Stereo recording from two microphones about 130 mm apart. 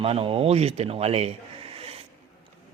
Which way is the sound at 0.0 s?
45° right (ahead or behind).